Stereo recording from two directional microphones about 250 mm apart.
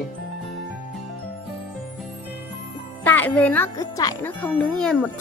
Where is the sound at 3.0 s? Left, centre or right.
Centre.